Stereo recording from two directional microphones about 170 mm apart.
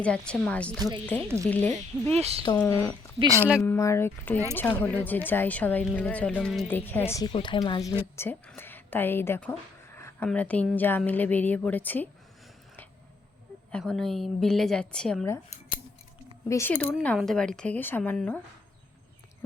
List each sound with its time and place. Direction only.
0.0 s a woman's voice: 5° left (ahead or behind)
0.8 s speech: 25° right (ahead or behind)
1.5 s a woman's voice: 10° left (ahead or behind)
2.1 s speech: 40° right (ahead or behind)
2.6 s a woman's voice: 15° left (ahead or behind)
3.2 s speech: 20° right (ahead or behind)
3.8 s a woman's voice: 15° left (ahead or behind)
8.1 s a woman's voice: 15° left (ahead or behind)
13.7 s a woman's voice: 5° left (ahead or behind)
16.5 s a woman's voice: 15° left (ahead or behind)